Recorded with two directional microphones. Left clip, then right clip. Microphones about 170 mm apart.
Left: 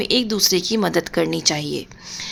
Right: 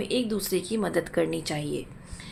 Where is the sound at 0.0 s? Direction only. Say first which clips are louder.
Left 10 dB; 45° left (ahead or behind).